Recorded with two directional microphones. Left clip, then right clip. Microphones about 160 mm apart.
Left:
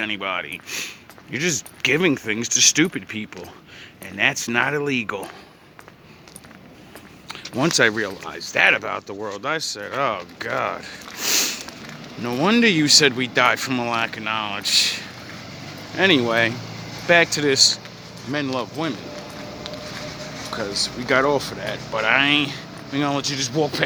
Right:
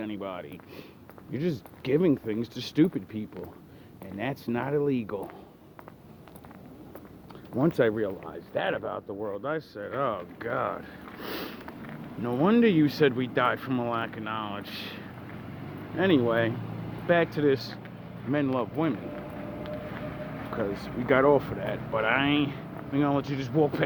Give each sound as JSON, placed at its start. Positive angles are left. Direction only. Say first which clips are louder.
{"t": 0.0, "sound": "speech", "louder": "left 11 dB", "side_deg": 20}
{"t": 7.6, "sound": "speech", "louder": "left 7 dB", "side_deg": 45}
{"t": 18.3, "sound": "speech", "louder": "left 3 dB", "side_deg": 15}
{"t": 20.5, "sound": "speech", "louder": "left 7 dB", "side_deg": 10}
{"t": 23.2, "sound": "speech", "louder": "left 4 dB", "side_deg": 20}